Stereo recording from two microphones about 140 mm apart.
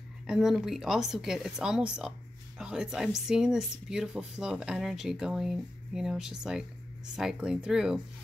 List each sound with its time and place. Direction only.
0.3 s speech: centre (ahead or behind)